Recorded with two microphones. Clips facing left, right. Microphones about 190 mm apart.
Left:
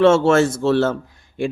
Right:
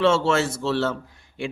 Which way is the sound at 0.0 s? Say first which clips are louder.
Left 7 dB; 50° left (ahead or behind).